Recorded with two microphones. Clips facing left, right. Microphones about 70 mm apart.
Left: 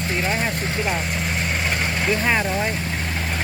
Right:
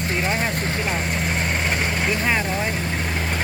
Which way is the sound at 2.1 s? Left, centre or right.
Centre.